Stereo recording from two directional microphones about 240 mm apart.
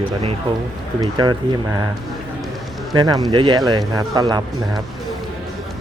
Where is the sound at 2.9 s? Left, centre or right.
Centre.